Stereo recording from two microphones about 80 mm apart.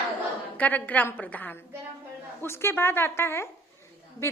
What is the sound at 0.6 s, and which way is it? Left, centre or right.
A woman's voice, centre.